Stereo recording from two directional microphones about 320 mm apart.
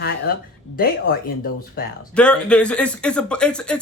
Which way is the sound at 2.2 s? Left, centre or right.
Centre.